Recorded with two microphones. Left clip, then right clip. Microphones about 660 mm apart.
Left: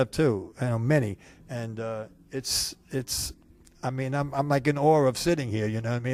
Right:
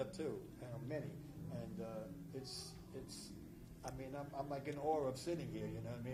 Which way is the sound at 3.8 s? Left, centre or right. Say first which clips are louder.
Left 18 dB; left.